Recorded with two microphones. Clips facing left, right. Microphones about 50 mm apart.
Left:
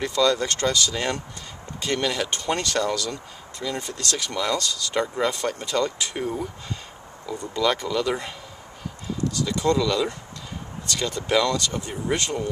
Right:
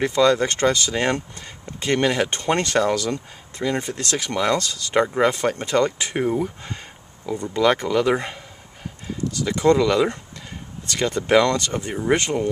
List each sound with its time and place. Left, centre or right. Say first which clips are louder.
0.0 s speech: right 4 dB; right
9.7 s speech: right 6 dB; right